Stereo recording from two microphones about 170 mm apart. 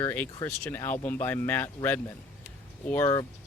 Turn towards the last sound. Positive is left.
turn(degrees=10)  # may be behind; listen again after turning